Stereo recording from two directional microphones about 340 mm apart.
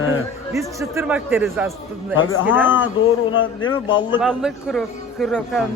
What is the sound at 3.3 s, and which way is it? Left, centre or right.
Speech, left.